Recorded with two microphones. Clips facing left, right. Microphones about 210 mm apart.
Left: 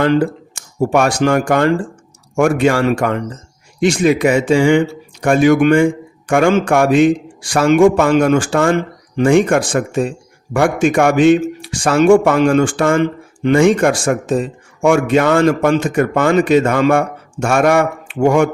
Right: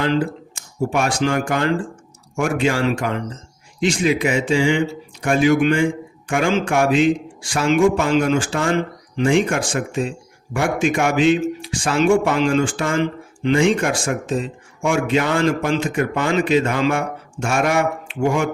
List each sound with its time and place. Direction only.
0.0 s speech: 55° left (ahead or behind)
7.8 s speech: 65° left (ahead or behind); by 14.5 s 50° left (ahead or behind)
14.8 s speech: 65° left (ahead or behind)